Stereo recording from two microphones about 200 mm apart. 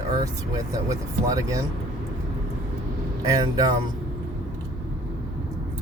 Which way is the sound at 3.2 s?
20° right (ahead or behind).